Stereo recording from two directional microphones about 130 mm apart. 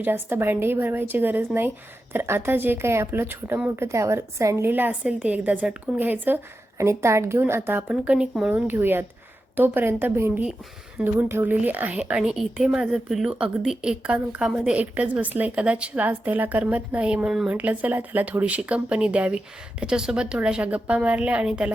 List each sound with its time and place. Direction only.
0.0 s a woman's voice: 15° right (ahead or behind)